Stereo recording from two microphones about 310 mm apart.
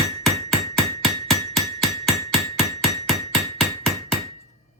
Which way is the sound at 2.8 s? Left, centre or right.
Centre.